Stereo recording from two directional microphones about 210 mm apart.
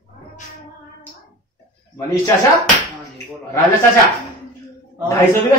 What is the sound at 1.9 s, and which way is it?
Speech, 15° left (ahead or behind).